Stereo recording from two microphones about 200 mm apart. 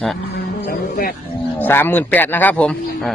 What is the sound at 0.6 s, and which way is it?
Music, 50° left (ahead or behind).